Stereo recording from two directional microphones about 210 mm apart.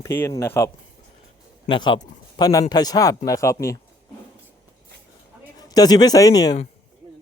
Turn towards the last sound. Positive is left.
turn(degrees=20)  # may be behind; listen again after turning